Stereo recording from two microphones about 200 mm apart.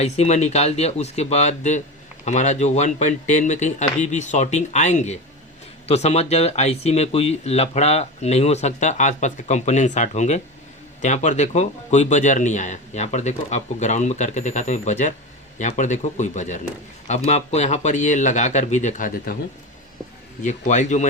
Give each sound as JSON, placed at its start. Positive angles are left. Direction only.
{"t": 0.0, "sound": "speech", "side_deg": 35}
{"t": 20.4, "sound": "speech", "side_deg": 35}